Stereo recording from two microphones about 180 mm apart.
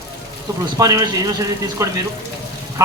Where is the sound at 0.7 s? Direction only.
20° right (ahead or behind).